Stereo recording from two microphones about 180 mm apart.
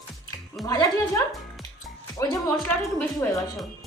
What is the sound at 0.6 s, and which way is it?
Speech, centre (ahead or behind).